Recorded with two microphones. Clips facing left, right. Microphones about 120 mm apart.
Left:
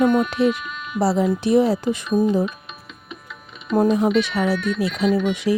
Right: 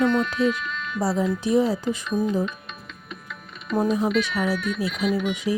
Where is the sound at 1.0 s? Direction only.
70° left (ahead or behind).